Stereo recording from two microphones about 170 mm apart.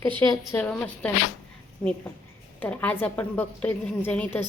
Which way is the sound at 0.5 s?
5° left (ahead or behind).